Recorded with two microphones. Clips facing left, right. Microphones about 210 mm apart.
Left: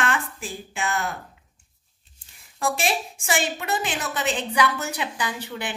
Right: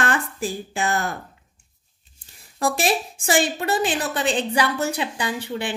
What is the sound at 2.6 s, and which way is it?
Speech, 35° right (ahead or behind).